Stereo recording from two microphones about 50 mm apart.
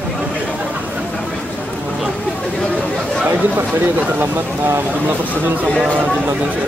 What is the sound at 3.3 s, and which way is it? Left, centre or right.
Speech, right.